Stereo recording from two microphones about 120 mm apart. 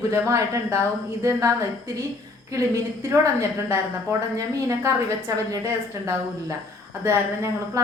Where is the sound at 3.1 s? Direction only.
25° right (ahead or behind).